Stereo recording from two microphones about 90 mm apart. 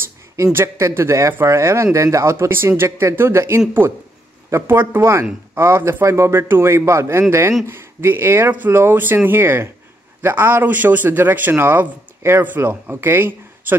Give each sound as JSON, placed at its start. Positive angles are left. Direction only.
{"t": 0.4, "sound": "speech", "side_deg": -30}